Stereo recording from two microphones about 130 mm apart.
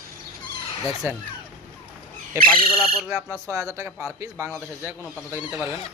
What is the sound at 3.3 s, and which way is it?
Speech, 25° right (ahead or behind).